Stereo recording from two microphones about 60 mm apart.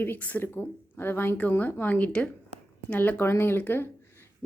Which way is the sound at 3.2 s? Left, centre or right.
Left.